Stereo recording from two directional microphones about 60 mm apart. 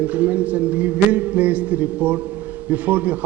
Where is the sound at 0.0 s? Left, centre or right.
Right.